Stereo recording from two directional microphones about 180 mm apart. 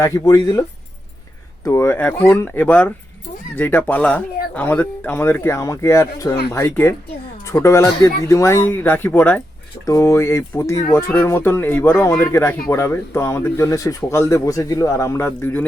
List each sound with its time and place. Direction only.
0.0 s speech: 20° left (ahead or behind)
1.6 s speech: 15° left (ahead or behind)